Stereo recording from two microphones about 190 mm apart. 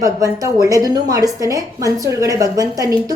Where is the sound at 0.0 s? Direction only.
15° right (ahead or behind).